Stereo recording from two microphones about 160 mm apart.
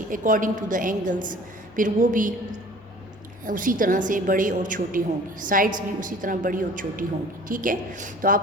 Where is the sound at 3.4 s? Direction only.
55° right (ahead or behind).